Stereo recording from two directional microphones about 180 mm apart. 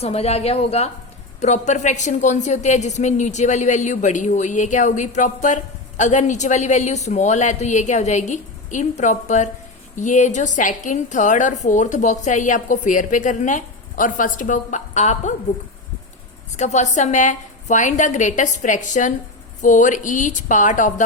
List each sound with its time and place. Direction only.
0.0 s a woman's voice: 35° left (ahead or behind)
16.6 s a woman's voice: 40° left (ahead or behind)